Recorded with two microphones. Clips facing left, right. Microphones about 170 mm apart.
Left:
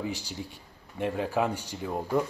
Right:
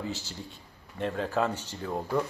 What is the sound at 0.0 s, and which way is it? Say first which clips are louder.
A man's voice: left 2 dB; 15° left (ahead or behind).